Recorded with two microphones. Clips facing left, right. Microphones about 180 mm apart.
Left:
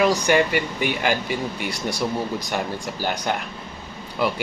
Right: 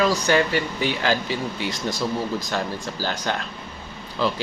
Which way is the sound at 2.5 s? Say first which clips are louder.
Left 1 dB; 15° left (ahead or behind).